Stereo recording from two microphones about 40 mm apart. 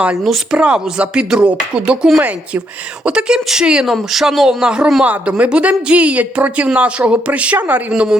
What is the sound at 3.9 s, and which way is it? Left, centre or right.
Speech, centre.